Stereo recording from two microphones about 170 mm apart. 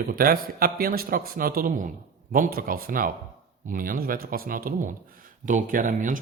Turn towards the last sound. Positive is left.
turn(degrees=-50)  # may be behind; listen again after turning